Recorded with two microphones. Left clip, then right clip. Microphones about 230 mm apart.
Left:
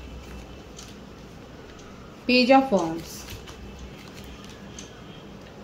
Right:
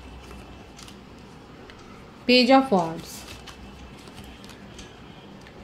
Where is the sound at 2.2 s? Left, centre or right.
Right.